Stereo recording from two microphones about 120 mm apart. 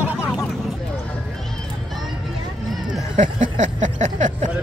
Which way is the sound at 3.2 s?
90° right.